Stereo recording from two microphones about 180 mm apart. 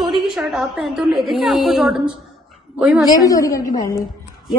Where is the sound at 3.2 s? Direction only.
20° left (ahead or behind).